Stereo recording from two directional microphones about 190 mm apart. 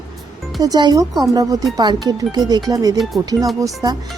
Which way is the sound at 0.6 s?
20° right (ahead or behind).